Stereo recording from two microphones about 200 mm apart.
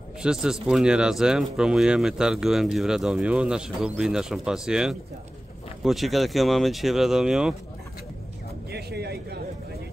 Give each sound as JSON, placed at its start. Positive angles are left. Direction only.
{"t": 0.2, "sound": "speech", "side_deg": -5}
{"t": 8.7, "sound": "speech", "side_deg": -55}